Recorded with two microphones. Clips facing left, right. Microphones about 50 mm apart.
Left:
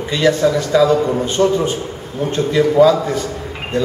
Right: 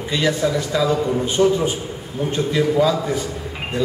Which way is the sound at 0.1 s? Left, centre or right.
Centre.